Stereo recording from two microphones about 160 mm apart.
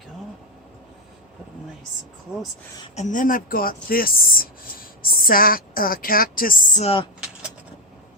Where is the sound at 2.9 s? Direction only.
50° left (ahead or behind).